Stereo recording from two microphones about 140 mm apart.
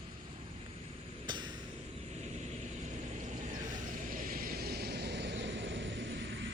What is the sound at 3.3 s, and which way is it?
Vehicle, 70° right (ahead or behind).